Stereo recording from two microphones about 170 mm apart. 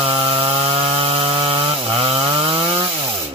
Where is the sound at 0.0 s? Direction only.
35° right (ahead or behind).